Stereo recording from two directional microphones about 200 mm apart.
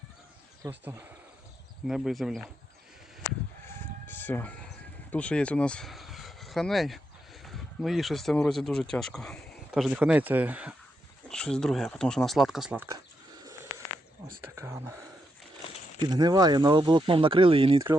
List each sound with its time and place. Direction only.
0.6 s speech: 10° right (ahead or behind)
3.7 s music: 10° left (ahead or behind)
5.1 s speech: 5° left (ahead or behind)
11.3 s speech: 5° left (ahead or behind); by 13.8 s 15° right (ahead or behind)
14.5 s whispering: 15° right (ahead or behind)
16.0 s speech: 20° right (ahead or behind)